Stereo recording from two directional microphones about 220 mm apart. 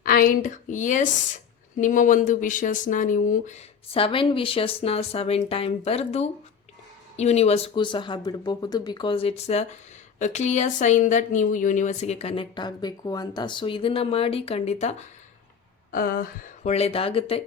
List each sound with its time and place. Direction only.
0.0 s speech: 40° left (ahead or behind)
15.9 s speech: 40° left (ahead or behind); by 17.4 s 25° left (ahead or behind)